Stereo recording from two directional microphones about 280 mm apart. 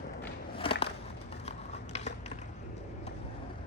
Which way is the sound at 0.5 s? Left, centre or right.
Centre.